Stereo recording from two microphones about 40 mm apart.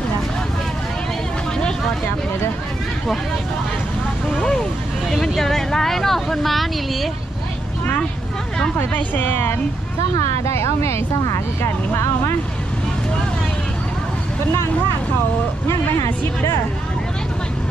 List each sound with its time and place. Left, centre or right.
5.1 s speech: centre
8.9 s speech: left